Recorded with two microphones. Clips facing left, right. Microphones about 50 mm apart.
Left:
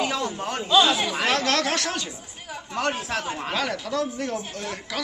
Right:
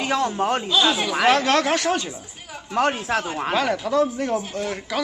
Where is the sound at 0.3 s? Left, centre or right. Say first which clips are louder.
Right 8 dB; right.